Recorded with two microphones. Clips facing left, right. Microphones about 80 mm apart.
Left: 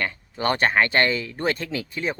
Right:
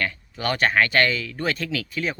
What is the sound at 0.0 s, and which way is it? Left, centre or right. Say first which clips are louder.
Speech: left 2 dB; left.